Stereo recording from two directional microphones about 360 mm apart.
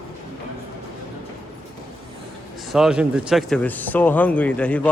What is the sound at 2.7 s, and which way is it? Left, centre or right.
Speech, centre.